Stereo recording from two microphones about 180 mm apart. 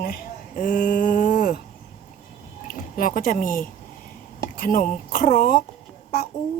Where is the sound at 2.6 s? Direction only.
50° left (ahead or behind).